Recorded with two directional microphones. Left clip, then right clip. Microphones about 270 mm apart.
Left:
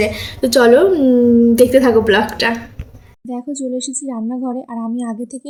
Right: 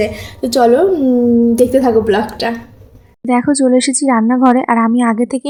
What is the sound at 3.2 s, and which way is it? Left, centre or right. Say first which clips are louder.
Speech: right 12 dB; right.